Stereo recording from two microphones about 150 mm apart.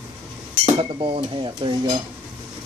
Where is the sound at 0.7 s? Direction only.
40° right (ahead or behind).